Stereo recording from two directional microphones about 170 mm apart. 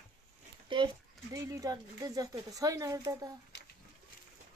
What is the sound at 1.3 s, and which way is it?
Speech, 20° right (ahead or behind).